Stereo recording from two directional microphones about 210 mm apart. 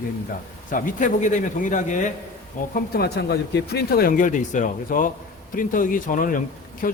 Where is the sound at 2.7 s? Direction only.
50° left (ahead or behind).